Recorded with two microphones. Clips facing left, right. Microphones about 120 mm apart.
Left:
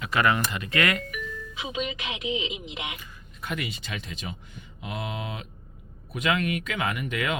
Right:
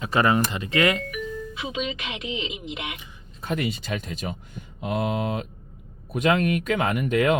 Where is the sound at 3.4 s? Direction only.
40° right (ahead or behind).